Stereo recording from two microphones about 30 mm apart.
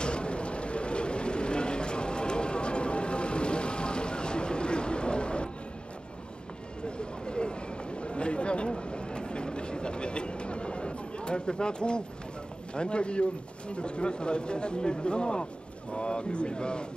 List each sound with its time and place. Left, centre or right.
0.0 s vehicle: left
7.0 s a sound: left
12.7 s speech: left